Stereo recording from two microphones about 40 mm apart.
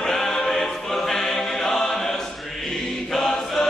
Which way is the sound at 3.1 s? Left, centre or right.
Centre.